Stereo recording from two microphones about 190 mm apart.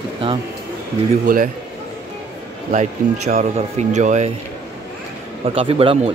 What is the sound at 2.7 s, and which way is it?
Speech, 45° right (ahead or behind).